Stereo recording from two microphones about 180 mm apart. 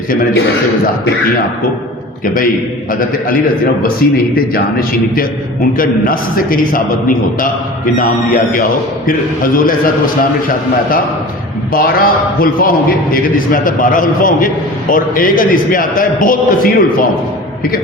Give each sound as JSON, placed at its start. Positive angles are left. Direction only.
{"t": 2.2, "sound": "a man's voice", "side_deg": 50}
{"t": 4.0, "sound": "a man's voice", "side_deg": 55}
{"t": 7.9, "sound": "a man's voice", "side_deg": 50}
{"t": 11.7, "sound": "a man's voice", "side_deg": 55}